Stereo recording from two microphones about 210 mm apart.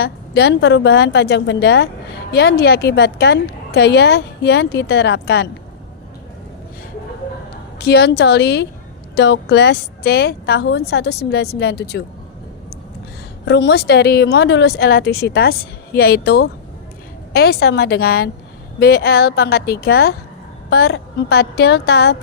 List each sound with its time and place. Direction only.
0.0 s a woman's voice: 50° left (ahead or behind)
7.8 s a woman's voice: 50° left (ahead or behind)
13.4 s a woman's voice: 55° left (ahead or behind)